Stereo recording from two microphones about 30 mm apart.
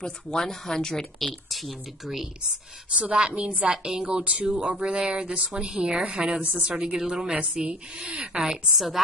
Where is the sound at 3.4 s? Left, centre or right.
Right.